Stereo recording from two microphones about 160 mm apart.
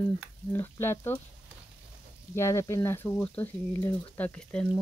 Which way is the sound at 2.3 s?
15° left (ahead or behind).